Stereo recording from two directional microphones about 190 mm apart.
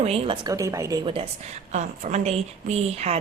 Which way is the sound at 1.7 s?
40° right (ahead or behind).